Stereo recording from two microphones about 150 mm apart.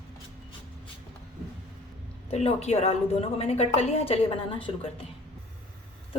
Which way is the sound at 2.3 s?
45° left (ahead or behind).